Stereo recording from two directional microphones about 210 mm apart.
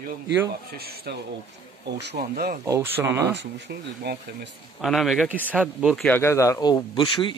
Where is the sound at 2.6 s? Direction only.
15° right (ahead or behind).